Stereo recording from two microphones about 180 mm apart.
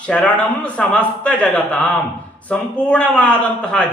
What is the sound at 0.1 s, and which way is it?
A man's voice, 5° left (ahead or behind).